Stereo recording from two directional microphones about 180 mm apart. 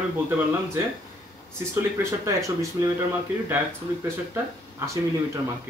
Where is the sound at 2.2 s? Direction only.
15° right (ahead or behind).